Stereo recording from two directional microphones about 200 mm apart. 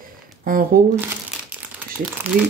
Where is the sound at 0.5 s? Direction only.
45° right (ahead or behind).